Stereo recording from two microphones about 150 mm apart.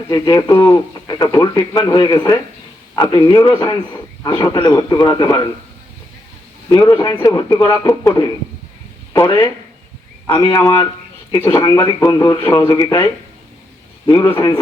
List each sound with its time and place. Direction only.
0.1 s speech: 25° left (ahead or behind)
6.7 s speech: 25° left (ahead or behind)
14.1 s speech: 20° left (ahead or behind)